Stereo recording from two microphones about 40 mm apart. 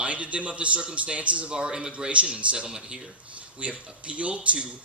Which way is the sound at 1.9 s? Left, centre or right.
Right.